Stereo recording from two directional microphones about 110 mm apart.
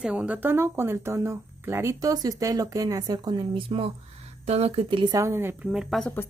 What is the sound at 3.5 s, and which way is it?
Speech, 60° right (ahead or behind).